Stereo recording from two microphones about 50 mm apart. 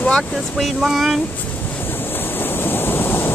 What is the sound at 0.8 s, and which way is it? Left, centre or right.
Speech, centre.